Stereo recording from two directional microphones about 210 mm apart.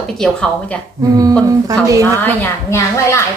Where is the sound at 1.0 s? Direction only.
15° right (ahead or behind).